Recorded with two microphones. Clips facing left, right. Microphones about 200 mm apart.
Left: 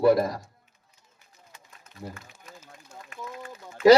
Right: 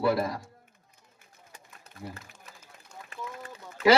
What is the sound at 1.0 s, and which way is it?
Run, 50° right (ahead or behind).